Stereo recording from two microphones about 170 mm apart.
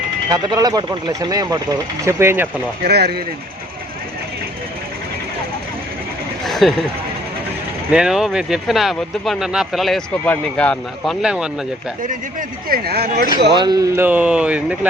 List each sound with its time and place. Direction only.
0.3 s speech: 25° right (ahead or behind)
2.8 s speech: 65° right (ahead or behind)
6.4 s a sound: centre (ahead or behind)
7.9 s speech: 5° right (ahead or behind)
12.0 s speech: 55° right (ahead or behind)
13.6 s speech: 25° right (ahead or behind)
13.9 s speech: 10° right (ahead or behind)